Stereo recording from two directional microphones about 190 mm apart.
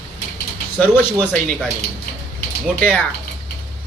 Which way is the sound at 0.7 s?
10° left (ahead or behind).